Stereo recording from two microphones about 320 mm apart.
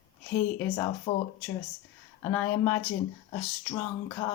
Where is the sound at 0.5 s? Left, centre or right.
Centre.